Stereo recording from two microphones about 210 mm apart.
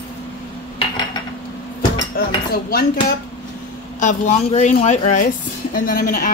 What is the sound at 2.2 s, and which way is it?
Speech, 45° left (ahead or behind).